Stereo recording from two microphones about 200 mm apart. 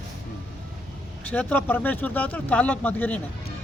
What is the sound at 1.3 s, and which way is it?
Speech, 10° left (ahead or behind).